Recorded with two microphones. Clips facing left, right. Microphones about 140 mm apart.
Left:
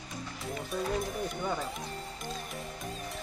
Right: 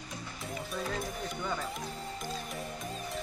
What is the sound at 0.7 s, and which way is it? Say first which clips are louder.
A man's voice: left 5 dB; centre (ahead or behind).